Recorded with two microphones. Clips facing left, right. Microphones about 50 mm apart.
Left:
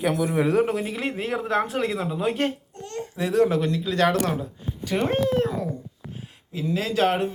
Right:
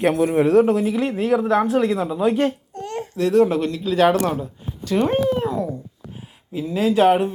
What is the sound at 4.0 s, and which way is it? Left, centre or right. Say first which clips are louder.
Speech: right 5 dB; centre.